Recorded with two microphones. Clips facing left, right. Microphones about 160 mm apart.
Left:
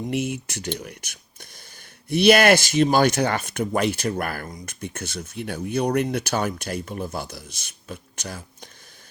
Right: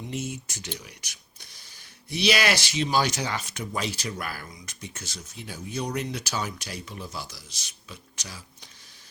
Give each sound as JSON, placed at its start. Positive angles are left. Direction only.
{"t": 0.1, "sound": "speech", "side_deg": 65}